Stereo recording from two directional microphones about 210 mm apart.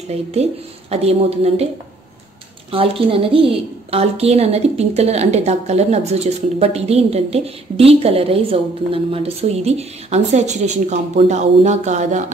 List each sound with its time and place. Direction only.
0.3 s a woman's voice: 30° right (ahead or behind)
2.7 s a woman's voice: 25° right (ahead or behind)